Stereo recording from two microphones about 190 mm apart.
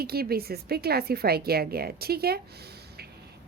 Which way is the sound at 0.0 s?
55° right (ahead or behind).